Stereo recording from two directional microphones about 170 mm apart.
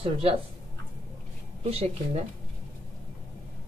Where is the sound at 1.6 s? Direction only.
35° right (ahead or behind).